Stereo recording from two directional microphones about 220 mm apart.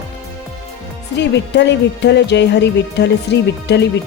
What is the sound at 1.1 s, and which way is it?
Speech, 50° left (ahead or behind).